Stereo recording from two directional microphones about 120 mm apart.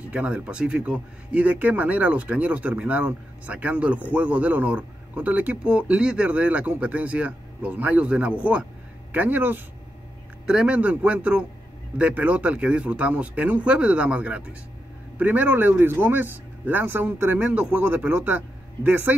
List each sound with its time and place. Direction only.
0.1 s speech: 10° right (ahead or behind)